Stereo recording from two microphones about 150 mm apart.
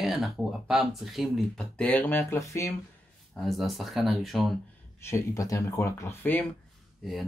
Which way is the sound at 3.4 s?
Centre (ahead or behind).